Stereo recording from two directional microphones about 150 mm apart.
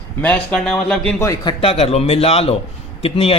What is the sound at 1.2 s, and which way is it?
A man's voice, 25° left (ahead or behind).